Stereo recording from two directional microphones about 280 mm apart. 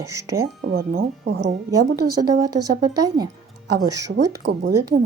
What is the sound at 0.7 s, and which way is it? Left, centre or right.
Speech, right.